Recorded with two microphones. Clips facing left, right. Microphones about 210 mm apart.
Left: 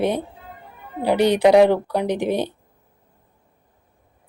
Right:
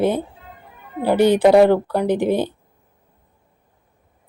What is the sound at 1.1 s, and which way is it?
Speech, 65° left (ahead or behind).